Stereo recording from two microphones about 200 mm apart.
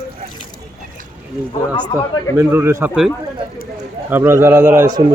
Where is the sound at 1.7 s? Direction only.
5° left (ahead or behind).